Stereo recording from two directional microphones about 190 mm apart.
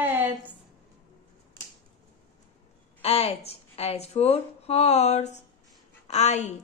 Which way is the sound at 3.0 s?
30° left (ahead or behind).